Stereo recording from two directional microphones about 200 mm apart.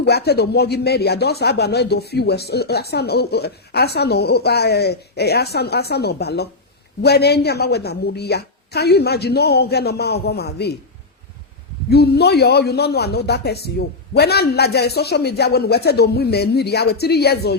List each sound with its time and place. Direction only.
0.0 s a man's voice: 55° left (ahead or behind)
11.9 s a man's voice: 55° left (ahead or behind)